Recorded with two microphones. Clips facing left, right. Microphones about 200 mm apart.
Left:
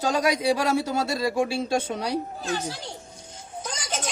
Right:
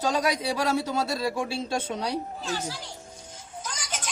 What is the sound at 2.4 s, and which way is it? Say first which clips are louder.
Speech: left 3 dB; 55° left (ahead or behind).